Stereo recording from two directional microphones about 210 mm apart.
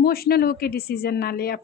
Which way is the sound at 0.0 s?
45° left (ahead or behind).